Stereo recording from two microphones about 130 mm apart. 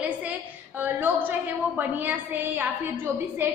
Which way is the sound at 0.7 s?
15° right (ahead or behind).